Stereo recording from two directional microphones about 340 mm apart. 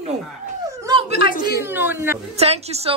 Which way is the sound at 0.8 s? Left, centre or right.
Centre.